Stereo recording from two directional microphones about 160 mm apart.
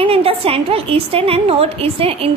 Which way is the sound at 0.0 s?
35° right (ahead or behind).